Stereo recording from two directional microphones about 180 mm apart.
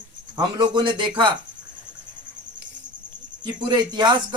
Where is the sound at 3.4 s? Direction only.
25° right (ahead or behind).